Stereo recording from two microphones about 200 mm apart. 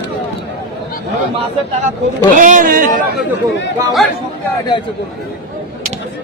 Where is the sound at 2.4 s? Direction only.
40° right (ahead or behind).